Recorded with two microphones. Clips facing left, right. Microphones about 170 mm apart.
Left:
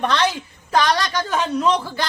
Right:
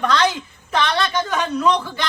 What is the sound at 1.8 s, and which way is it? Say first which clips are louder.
Speech: even; 35° left (ahead or behind).